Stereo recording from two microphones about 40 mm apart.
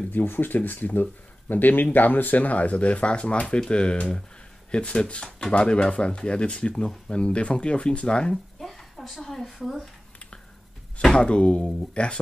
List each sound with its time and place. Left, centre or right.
0.1 s speech: left
8.5 s a sound: centre
11.1 s speech: left